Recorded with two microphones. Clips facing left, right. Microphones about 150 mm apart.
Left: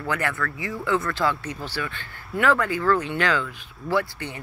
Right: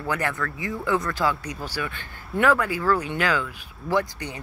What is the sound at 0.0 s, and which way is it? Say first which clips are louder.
Speech: even; 15° right (ahead or behind).